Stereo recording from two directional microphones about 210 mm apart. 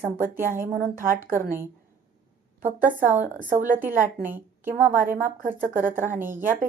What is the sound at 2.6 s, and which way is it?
Speech, 10° right (ahead or behind).